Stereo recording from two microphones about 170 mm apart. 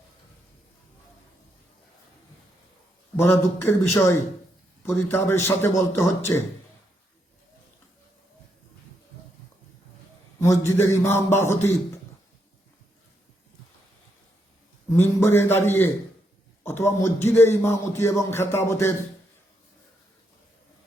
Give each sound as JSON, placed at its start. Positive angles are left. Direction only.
{"t": 3.2, "sound": "speech", "side_deg": 15}
{"t": 10.4, "sound": "speech", "side_deg": 15}
{"t": 14.8, "sound": "speech", "side_deg": 15}